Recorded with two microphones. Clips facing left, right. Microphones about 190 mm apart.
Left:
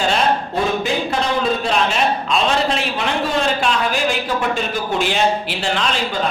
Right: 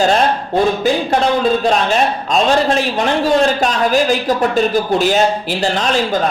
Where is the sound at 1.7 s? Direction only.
40° right (ahead or behind).